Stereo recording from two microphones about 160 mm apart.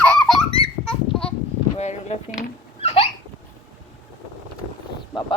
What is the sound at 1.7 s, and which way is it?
Speech, 45° left (ahead or behind).